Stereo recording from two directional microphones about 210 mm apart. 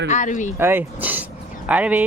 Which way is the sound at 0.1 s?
35° left (ahead or behind).